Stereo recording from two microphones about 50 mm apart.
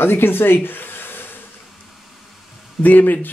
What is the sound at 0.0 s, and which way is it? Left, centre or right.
Speech, left.